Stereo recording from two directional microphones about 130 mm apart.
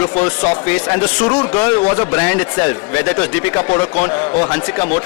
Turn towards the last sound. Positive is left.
turn(degrees=15)  # may be behind; listen again after turning